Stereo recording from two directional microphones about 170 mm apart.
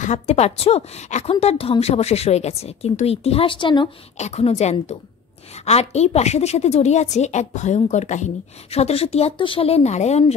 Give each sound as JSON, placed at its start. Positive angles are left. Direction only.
{"t": 0.0, "sound": "a woman's voice", "side_deg": 45}
{"t": 4.2, "sound": "a woman's voice", "side_deg": 40}